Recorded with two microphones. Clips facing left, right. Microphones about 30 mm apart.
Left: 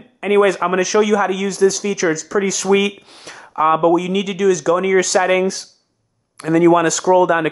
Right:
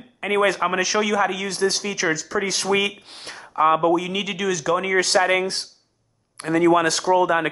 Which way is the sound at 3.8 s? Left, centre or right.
Left.